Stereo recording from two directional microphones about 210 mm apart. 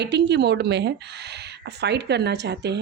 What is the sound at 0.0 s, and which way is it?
Speech, 55° right (ahead or behind).